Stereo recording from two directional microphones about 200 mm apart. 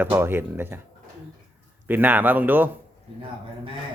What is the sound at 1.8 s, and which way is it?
Speech, 10° right (ahead or behind).